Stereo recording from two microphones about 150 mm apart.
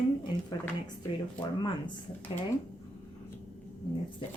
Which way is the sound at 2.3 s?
35° left (ahead or behind).